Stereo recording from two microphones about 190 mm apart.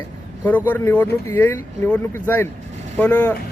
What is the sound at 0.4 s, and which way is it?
Speech, 10° left (ahead or behind).